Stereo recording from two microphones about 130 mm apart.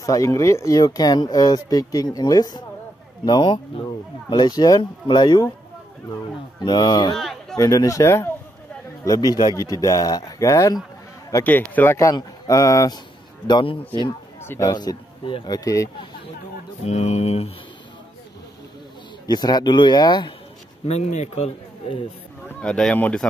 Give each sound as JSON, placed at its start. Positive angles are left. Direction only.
{"t": 0.0, "sound": "speech", "side_deg": 25}
{"t": 6.6, "sound": "speech", "side_deg": 35}
{"t": 7.2, "sound": "a sound", "side_deg": 0}
{"t": 7.5, "sound": "speech", "side_deg": 25}
{"t": 11.4, "sound": "speech", "side_deg": 15}
{"t": 14.4, "sound": "speech", "side_deg": 20}
{"t": 14.7, "sound": "speech", "side_deg": 35}
{"t": 16.8, "sound": "speech", "side_deg": 55}
{"t": 19.2, "sound": "speech", "side_deg": 30}
{"t": 20.8, "sound": "a man's voice", "side_deg": 55}
{"t": 22.6, "sound": "speech", "side_deg": 5}